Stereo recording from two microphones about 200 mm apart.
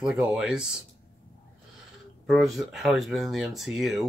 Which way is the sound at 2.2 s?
Centre (ahead or behind).